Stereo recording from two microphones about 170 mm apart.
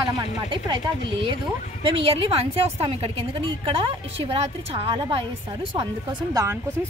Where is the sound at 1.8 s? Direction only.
30° right (ahead or behind).